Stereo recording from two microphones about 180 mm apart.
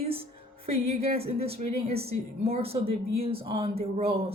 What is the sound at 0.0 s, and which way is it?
Music, 30° right (ahead or behind).